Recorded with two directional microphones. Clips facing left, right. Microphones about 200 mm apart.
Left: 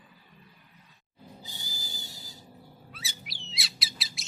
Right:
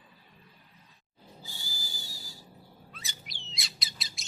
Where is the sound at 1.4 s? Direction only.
20° left (ahead or behind).